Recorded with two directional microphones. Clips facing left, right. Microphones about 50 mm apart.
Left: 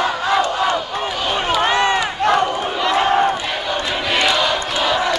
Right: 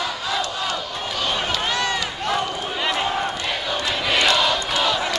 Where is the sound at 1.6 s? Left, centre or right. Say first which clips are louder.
Left 7 dB; left.